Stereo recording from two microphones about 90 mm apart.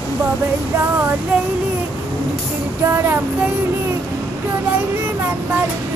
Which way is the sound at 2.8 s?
30° right (ahead or behind).